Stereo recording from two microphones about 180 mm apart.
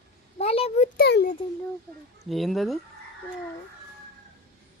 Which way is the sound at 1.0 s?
60° left (ahead or behind).